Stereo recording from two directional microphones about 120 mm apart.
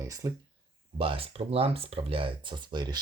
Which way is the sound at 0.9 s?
50° right (ahead or behind).